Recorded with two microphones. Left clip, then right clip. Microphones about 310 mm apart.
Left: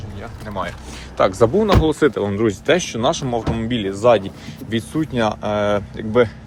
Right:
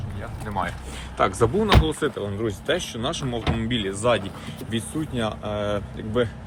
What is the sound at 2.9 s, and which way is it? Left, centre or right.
Speech, centre.